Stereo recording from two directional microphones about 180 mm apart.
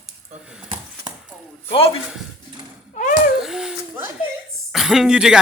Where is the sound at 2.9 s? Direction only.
50° left (ahead or behind).